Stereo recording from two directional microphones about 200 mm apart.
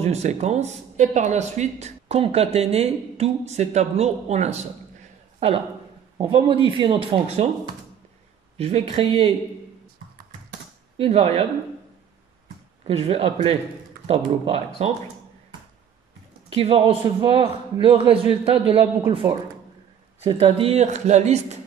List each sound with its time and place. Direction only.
0.0 s speech: 35° right (ahead or behind)
6.1 s a man's voice: 25° right (ahead or behind)
8.5 s a man's voice: 30° right (ahead or behind)
11.0 s a man's voice: 30° right (ahead or behind)
12.8 s a man's voice: 30° right (ahead or behind)
16.4 s a man's voice: 30° right (ahead or behind)
20.2 s speech: 30° right (ahead or behind)